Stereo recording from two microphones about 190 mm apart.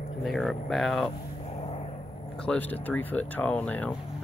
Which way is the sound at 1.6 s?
35° left (ahead or behind).